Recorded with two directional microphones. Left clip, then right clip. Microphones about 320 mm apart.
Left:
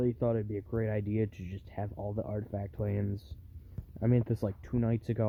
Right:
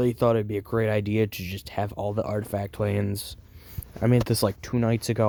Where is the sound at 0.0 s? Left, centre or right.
Centre.